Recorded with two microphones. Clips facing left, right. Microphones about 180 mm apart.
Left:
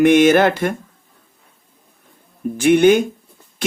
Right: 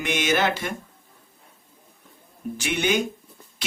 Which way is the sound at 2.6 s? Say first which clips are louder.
Left 13 dB; 55° left (ahead or behind).